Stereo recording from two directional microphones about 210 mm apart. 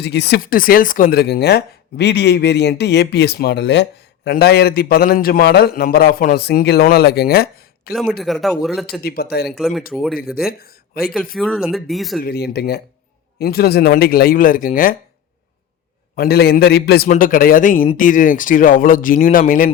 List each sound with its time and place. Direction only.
0.0 s speech: 55° left (ahead or behind)
8.2 s speech: centre (ahead or behind)
9.0 s speech: 45° left (ahead or behind)
9.5 s speech: centre (ahead or behind)
10.3 s speech: 45° left (ahead or behind)
11.3 s speech: centre (ahead or behind)
12.2 s speech: 50° left (ahead or behind)
16.1 s speech: 45° left (ahead or behind)
17.1 s speech: 40° left (ahead or behind)